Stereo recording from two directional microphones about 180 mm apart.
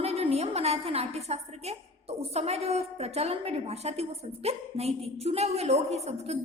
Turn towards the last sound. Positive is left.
turn(degrees=-35)  # may be behind; listen again after turning